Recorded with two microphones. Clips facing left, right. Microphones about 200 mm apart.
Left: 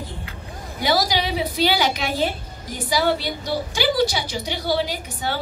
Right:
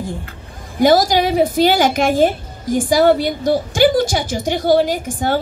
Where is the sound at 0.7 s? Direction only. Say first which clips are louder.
Right 9 dB; 50° right (ahead or behind).